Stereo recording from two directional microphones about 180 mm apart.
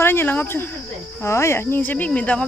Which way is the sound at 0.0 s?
10° left (ahead or behind).